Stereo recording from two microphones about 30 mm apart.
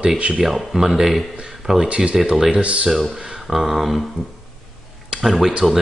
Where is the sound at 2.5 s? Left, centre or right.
Right.